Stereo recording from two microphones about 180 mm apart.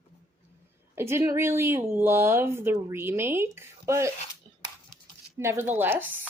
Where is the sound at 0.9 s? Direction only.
15° right (ahead or behind).